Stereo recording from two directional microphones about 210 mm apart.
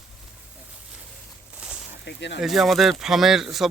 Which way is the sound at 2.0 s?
55° left (ahead or behind).